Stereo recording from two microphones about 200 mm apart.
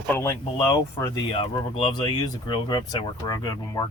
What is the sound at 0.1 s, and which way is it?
Speech, 15° left (ahead or behind).